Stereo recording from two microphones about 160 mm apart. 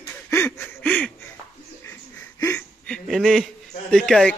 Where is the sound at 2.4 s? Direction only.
15° left (ahead or behind).